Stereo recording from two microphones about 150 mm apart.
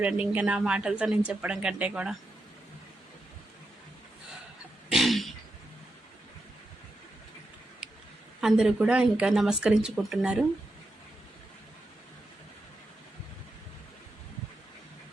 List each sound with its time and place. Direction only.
0.0 s a woman's voice: 10° right (ahead or behind)
4.9 s throat clearing: centre (ahead or behind)
8.4 s speech: 5° right (ahead or behind)